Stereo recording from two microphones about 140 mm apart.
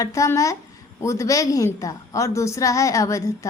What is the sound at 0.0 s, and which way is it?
A woman's voice, 20° left (ahead or behind).